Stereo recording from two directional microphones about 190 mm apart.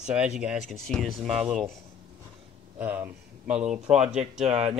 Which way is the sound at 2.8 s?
10° right (ahead or behind).